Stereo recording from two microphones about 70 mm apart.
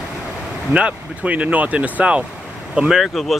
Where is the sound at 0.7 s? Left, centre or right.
Centre.